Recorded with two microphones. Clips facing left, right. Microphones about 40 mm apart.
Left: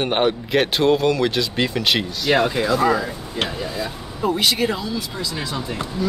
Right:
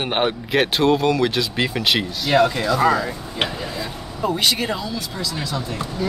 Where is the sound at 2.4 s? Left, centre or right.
Centre.